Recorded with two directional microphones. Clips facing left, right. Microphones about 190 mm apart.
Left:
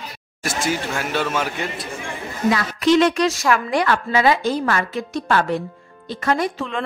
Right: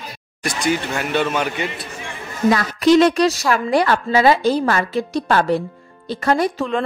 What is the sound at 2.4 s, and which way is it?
Speech, 40° right (ahead or behind).